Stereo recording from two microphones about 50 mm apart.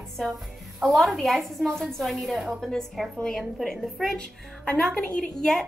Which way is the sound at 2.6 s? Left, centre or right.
Centre.